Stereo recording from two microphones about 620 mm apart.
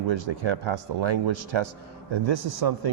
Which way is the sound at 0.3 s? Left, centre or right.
Right.